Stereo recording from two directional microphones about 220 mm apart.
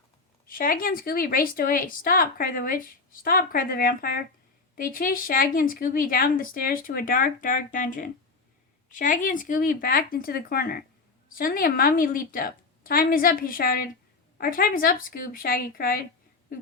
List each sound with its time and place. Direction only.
0.4 s speech: 40° left (ahead or behind)